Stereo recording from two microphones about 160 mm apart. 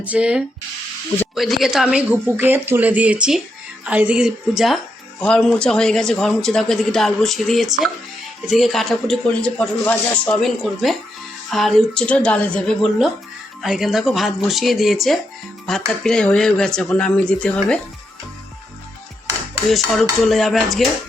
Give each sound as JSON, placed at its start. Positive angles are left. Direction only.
{"t": 0.0, "sound": "speech", "side_deg": -5}
{"t": 19.6, "sound": "speech", "side_deg": 0}